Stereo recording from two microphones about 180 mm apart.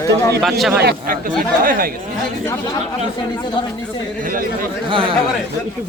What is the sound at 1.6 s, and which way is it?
Speech, 50° right (ahead or behind).